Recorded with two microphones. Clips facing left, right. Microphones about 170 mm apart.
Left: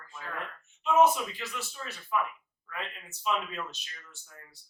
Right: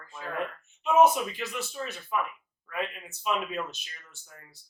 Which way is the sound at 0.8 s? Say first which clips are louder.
Right 2 dB; 15° right (ahead or behind).